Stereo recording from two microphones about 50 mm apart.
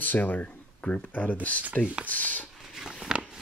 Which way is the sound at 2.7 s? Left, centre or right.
Centre.